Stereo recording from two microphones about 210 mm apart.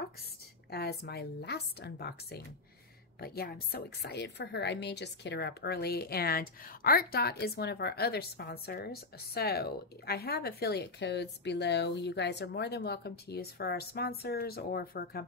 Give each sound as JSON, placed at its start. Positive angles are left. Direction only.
{"t": 0.7, "sound": "a woman's voice", "side_deg": 50}